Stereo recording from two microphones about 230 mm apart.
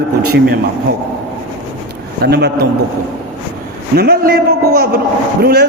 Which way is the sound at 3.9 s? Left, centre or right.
Right.